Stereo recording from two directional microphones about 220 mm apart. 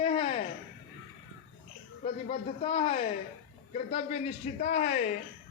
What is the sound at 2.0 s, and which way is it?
A man's voice, 30° left (ahead or behind).